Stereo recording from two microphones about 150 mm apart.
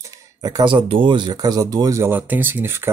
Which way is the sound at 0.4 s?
30° right (ahead or behind).